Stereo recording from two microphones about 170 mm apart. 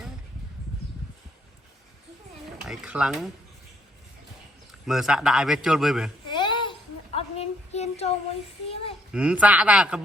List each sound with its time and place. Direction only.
2.6 s a man's voice: 5° right (ahead or behind)
4.9 s a man's voice: 5° right (ahead or behind)
6.2 s a sound: 25° left (ahead or behind)
8.7 s a child's voice: 35° left (ahead or behind)
9.1 s speech: 5° right (ahead or behind)